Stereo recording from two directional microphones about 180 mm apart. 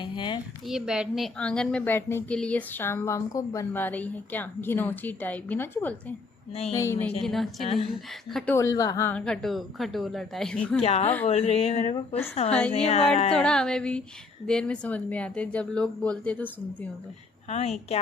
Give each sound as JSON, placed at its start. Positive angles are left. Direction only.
{"t": 0.0, "sound": "a sound", "side_deg": 25}
{"t": 0.7, "sound": "a woman's voice", "side_deg": -5}
{"t": 7.2, "sound": "speech", "side_deg": 0}
{"t": 8.5, "sound": "speech", "side_deg": 20}
{"t": 10.8, "sound": "speech", "side_deg": 35}
{"t": 12.5, "sound": "a woman's voice", "side_deg": 5}
{"t": 12.7, "sound": "speech", "side_deg": 35}
{"t": 13.3, "sound": "a woman's voice", "side_deg": 5}
{"t": 17.5, "sound": "speech", "side_deg": 35}